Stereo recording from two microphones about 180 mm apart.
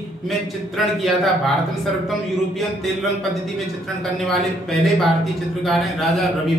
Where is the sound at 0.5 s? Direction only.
Centre (ahead or behind).